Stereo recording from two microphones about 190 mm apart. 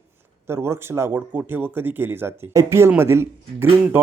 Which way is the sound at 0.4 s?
15° right (ahead or behind).